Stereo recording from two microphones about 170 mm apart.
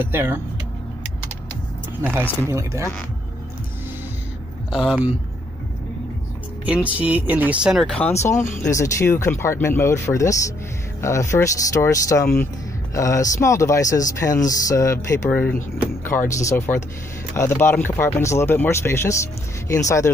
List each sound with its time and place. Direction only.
0.0 s speech: 15° right (ahead or behind)
2.0 s speech: 15° right (ahead or behind)
4.7 s speech: 5° right (ahead or behind)
6.6 s speech: 10° right (ahead or behind)
8.2 s speech: 15° left (ahead or behind)